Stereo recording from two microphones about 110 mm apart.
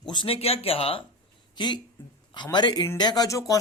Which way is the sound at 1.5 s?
40° left (ahead or behind).